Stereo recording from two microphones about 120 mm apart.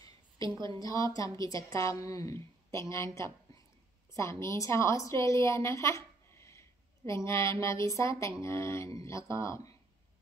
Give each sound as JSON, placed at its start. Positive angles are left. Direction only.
{"t": 0.7, "sound": "a woman's voice", "side_deg": 30}